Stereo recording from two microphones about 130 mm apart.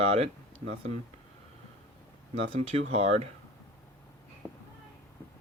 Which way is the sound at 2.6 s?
50° right (ahead or behind).